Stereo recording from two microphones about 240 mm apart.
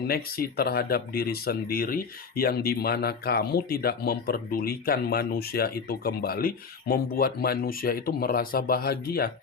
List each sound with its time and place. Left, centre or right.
0.1 s speech: left